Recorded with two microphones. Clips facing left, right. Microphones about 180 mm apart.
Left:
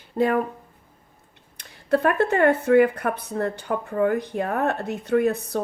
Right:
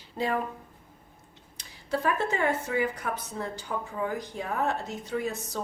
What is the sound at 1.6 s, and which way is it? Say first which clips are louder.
A woman's voice: left 8 dB; 60° left (ahead or behind).